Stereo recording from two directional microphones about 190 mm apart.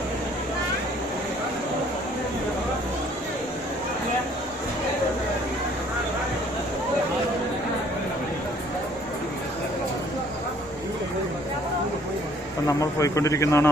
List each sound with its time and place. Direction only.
12.6 s a man's voice: 15° left (ahead or behind)